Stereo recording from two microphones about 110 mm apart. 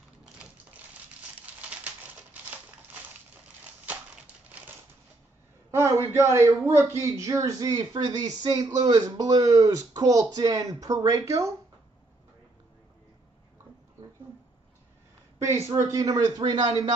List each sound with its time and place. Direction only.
1.4 s typewriter: 10° right (ahead or behind)
5.7 s a sound: 25° right (ahead or behind)
6.3 s a man's voice: 25° right (ahead or behind)
11.2 s speech: 30° right (ahead or behind)
15.3 s a man's voice: 25° right (ahead or behind); by 16.9 s 45° right (ahead or behind)